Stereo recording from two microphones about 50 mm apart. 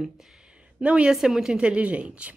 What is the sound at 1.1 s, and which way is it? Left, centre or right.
Speech, centre.